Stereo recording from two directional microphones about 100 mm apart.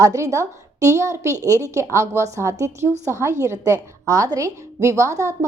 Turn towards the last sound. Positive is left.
turn(degrees=-30)  # may be behind; listen again after turning